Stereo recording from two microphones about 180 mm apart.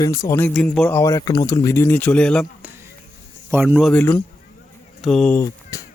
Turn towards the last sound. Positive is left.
turn(degrees=15)  # may be behind; listen again after turning